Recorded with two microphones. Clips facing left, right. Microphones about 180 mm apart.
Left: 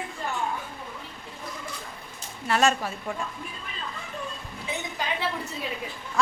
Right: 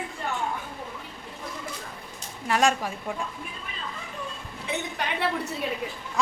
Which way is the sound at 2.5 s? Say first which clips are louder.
Even; 15° right (ahead or behind).